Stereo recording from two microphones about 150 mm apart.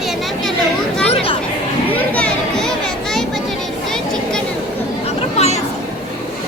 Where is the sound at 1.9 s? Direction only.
10° left (ahead or behind).